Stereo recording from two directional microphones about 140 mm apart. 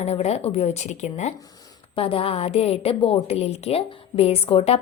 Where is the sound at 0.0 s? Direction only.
50° left (ahead or behind).